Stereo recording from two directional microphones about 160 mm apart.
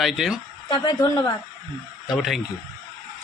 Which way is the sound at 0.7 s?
25° left (ahead or behind).